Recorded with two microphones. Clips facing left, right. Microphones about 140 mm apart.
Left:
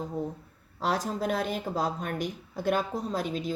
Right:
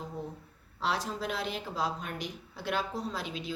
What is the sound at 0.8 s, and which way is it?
A woman's voice, 45° left (ahead or behind).